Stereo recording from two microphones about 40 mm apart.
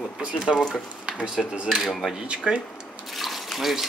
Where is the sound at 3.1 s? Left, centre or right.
Centre.